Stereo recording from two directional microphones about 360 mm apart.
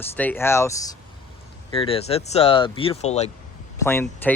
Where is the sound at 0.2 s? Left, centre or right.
Centre.